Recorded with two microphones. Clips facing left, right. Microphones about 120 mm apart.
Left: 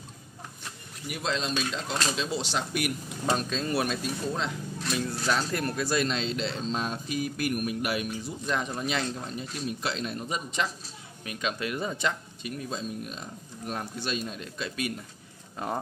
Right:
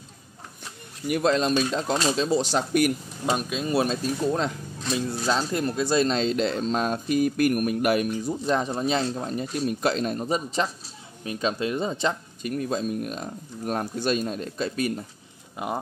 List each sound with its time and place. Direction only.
1.0 s speech: 55° right (ahead or behind)
3.3 s speech: 10° right (ahead or behind)
3.7 s speech: 30° right (ahead or behind); by 8.4 s 50° right (ahead or behind)
8.5 s speech: 35° right (ahead or behind)
9.3 s speech: 50° right (ahead or behind); by 12.2 s 30° right (ahead or behind)
12.4 s speech: 50° right (ahead or behind)
15.5 s speech: 15° right (ahead or behind)